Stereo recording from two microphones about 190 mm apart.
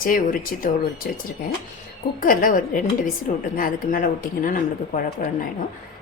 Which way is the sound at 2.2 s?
45° left (ahead or behind).